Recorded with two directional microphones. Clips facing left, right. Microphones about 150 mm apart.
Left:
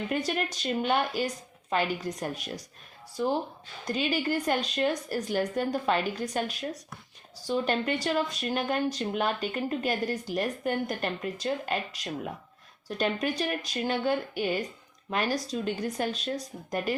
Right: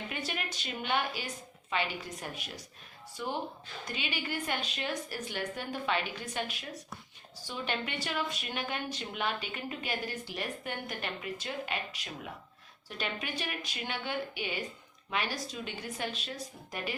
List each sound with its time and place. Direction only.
0.1 s a woman's voice: 40° left (ahead or behind)